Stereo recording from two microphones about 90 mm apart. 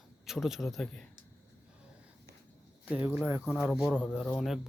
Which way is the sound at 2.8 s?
15° right (ahead or behind).